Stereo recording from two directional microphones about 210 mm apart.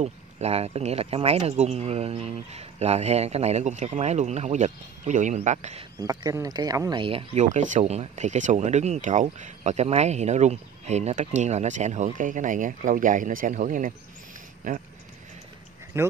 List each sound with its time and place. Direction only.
0.0 s speech: 30° right (ahead or behind)
6.0 s speech: 15° right (ahead or behind); by 14.8 s 40° right (ahead or behind)
15.9 s speech: 10° right (ahead or behind)